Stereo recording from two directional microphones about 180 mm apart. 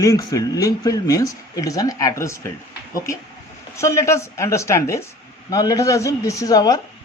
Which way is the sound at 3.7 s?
15° left (ahead or behind).